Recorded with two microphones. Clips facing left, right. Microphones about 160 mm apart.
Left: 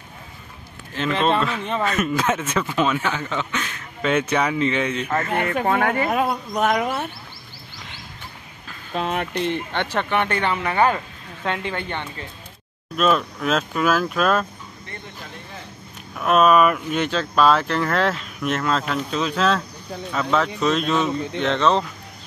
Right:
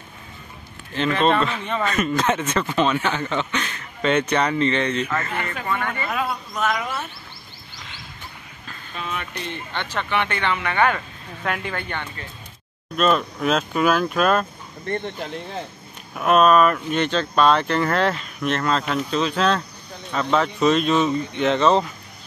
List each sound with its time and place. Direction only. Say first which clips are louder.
0.9 s speech: right 1 dB; 5° left (ahead or behind)
5.3 s speech: left 6 dB; 60° left (ahead or behind)
6.0 s speech: left 4 dB; 45° left (ahead or behind)
8.9 s speech: left 7 dB; 75° left (ahead or behind)
10.1 s speech: left 1 dB; 40° left (ahead or behind)
11.4 s speech: left 1 dB; 25° left (ahead or behind)
12.9 s speech: even; centre (ahead or behind)
16.2 s speech: even; centre (ahead or behind)